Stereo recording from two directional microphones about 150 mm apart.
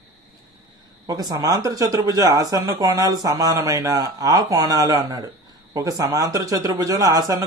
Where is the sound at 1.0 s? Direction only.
25° right (ahead or behind).